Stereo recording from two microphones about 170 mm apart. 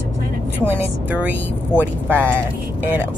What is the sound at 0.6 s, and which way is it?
Speech, 10° right (ahead or behind).